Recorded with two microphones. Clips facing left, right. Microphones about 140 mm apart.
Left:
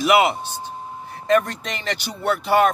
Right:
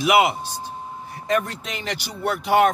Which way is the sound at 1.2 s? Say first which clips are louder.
Left 4 dB; 10° right (ahead or behind).